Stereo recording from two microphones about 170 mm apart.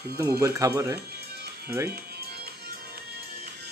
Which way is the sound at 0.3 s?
20° right (ahead or behind).